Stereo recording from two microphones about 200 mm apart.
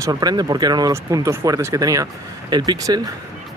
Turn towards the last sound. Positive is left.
turn(degrees=-15)  # may be behind; listen again after turning